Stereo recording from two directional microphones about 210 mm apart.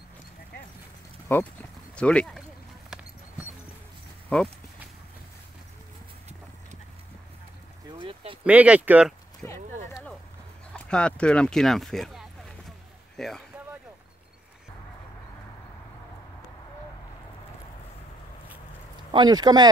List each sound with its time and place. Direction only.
1.3 s speech: 10° left (ahead or behind)
4.3 s speech: 5° left (ahead or behind)
8.0 s a sound: 25° right (ahead or behind)
8.5 s speech: 5° right (ahead or behind)
9.4 s speech: 10° left (ahead or behind)
10.7 s a sound: 5° left (ahead or behind)
19.1 s speech: 20° right (ahead or behind)